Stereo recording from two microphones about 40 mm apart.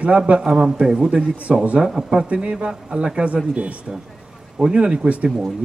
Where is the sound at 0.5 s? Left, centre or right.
Centre.